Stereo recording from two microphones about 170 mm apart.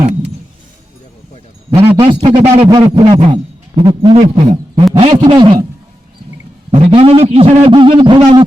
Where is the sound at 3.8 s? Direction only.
25° right (ahead or behind).